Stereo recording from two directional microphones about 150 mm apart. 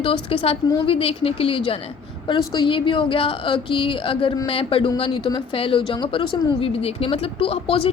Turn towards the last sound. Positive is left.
turn(degrees=40)  # may be behind; listen again after turning